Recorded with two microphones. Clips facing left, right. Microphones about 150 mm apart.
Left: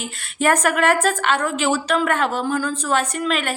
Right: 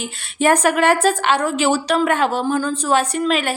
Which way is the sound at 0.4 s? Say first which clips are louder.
Right 3 dB; 30° right (ahead or behind).